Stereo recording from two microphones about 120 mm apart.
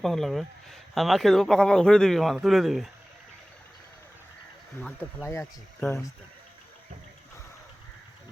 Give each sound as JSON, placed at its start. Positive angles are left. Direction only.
{"t": 0.0, "sound": "speech", "side_deg": 0}
{"t": 4.8, "sound": "speech", "side_deg": 15}